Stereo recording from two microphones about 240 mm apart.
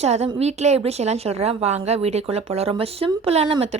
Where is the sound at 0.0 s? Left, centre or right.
Right.